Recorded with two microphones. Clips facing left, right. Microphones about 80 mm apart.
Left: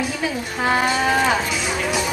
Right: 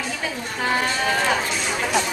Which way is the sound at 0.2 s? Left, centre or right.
Centre.